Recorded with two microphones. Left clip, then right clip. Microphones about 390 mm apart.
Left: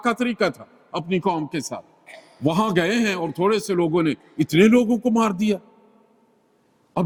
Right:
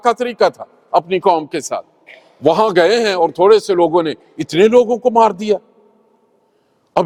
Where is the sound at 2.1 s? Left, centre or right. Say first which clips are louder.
Right 3 dB; left.